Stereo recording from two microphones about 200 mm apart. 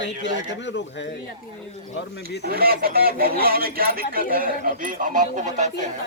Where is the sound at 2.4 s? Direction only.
50° right (ahead or behind).